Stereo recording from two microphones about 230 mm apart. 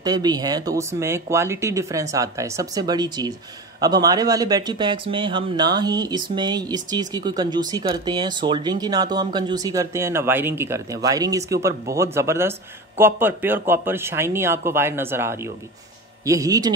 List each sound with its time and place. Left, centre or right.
0.0 s speech: centre